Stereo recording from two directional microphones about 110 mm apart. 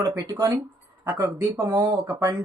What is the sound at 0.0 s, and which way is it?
Speech, 25° right (ahead or behind).